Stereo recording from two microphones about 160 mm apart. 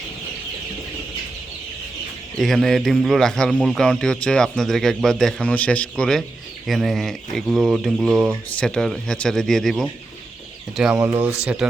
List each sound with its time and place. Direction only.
2.4 s speech: centre (ahead or behind)
11.0 s speech: 15° right (ahead or behind)
11.4 s speech: 5° right (ahead or behind)